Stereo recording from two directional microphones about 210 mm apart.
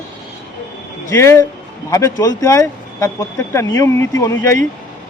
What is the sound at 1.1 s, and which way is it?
Speech, 15° left (ahead or behind).